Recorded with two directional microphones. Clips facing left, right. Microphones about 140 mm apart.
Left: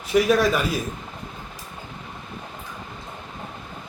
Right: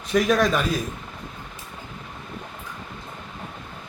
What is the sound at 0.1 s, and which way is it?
Speech, 5° left (ahead or behind).